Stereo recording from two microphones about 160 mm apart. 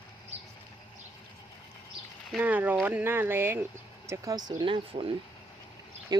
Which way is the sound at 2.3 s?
10° right (ahead or behind).